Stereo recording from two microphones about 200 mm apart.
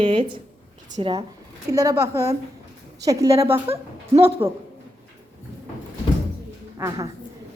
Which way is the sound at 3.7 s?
30° right (ahead or behind).